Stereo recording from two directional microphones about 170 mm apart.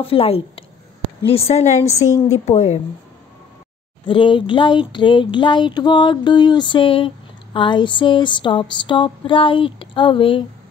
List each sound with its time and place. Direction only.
0.0 s a woman's voice: 35° left (ahead or behind)
4.0 s speech: 30° left (ahead or behind)